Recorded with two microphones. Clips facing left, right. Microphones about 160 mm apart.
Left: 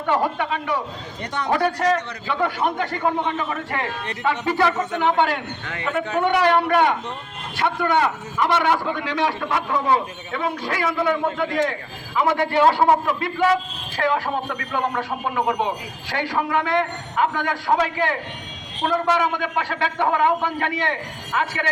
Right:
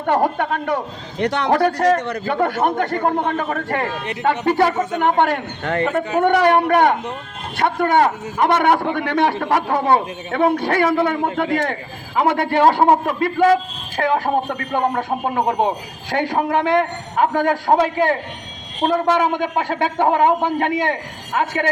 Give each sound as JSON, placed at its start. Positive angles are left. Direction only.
{"t": 0.0, "sound": "a man's voice", "side_deg": -45}
{"t": 1.2, "sound": "speech", "side_deg": -75}
{"t": 1.5, "sound": "a man's voice", "side_deg": -50}